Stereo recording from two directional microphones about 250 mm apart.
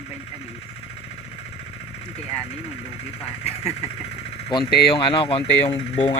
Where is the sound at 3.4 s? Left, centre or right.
Left.